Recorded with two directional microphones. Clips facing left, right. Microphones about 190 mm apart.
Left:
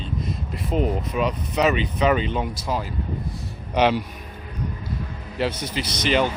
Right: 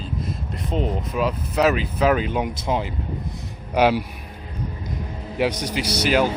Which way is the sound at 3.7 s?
10° right (ahead or behind).